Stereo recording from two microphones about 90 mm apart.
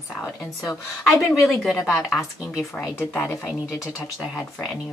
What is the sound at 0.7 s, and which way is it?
Speech, 35° left (ahead or behind).